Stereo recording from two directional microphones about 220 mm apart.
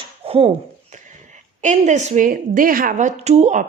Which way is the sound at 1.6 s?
35° right (ahead or behind).